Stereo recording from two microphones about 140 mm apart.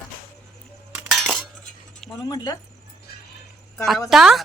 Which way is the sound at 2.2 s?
25° left (ahead or behind).